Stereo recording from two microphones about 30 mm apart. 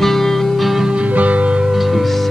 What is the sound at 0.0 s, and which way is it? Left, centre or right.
Music, centre.